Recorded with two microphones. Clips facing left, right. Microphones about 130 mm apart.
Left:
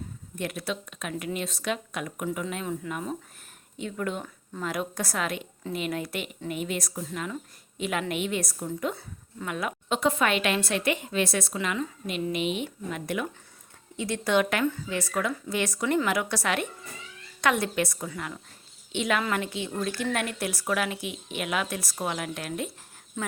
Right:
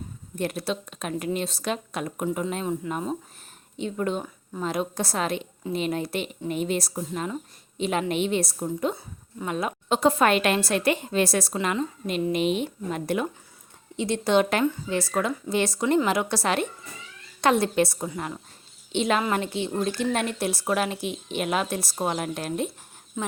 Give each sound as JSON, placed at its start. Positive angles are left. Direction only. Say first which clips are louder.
{"t": 0.3, "sound": "a woman's voice", "louder": "right 4 dB", "side_deg": -35}